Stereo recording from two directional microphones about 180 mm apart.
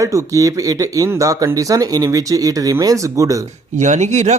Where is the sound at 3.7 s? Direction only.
40° right (ahead or behind).